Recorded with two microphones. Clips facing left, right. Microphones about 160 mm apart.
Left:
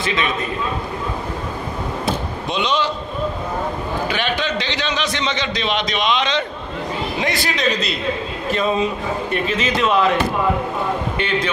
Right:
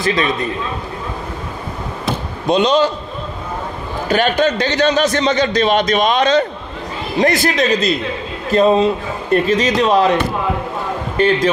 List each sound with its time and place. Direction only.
0.0 s a man's voice: 40° right (ahead or behind)
2.4 s a man's voice: 45° right (ahead or behind)
4.1 s a man's voice: 45° right (ahead or behind)
11.1 s a man's voice: 40° right (ahead or behind)